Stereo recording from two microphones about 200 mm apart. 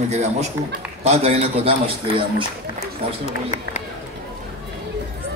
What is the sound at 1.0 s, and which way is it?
Speech, 30° right (ahead or behind).